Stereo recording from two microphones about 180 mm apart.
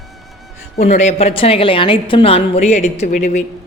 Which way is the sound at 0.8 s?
40° left (ahead or behind).